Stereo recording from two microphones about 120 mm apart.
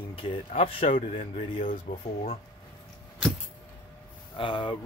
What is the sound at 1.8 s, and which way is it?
Speech, 70° left (ahead or behind).